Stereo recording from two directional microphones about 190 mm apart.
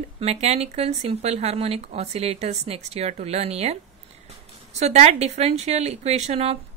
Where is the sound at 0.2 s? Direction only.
35° right (ahead or behind).